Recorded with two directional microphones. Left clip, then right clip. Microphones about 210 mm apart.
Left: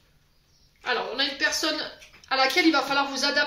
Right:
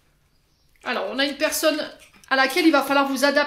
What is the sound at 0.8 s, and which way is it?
Speech, 55° right (ahead or behind).